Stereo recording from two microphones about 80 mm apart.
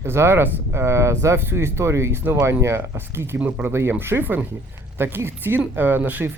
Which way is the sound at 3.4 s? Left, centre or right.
Centre.